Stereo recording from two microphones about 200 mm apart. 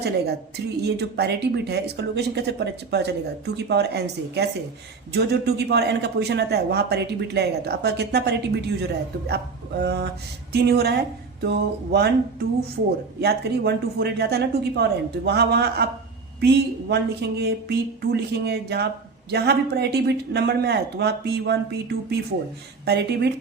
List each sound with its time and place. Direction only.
0.0 s speech: 55° right (ahead or behind)